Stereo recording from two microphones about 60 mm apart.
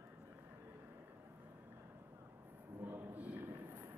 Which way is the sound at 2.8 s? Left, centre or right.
Right.